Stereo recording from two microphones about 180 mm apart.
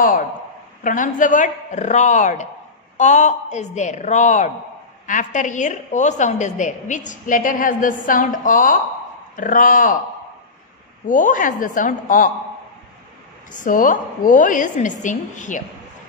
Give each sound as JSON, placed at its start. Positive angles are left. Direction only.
{"t": 0.8, "sound": "a woman's voice", "side_deg": 45}
{"t": 11.1, "sound": "a woman's voice", "side_deg": 45}
{"t": 13.5, "sound": "a woman's voice", "side_deg": 45}